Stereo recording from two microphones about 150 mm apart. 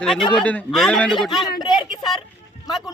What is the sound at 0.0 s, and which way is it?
Speech, 5° left (ahead or behind).